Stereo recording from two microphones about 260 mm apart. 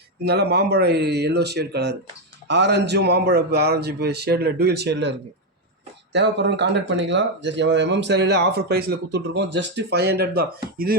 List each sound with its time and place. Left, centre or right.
0.3 s speech: right
6.1 s speech: right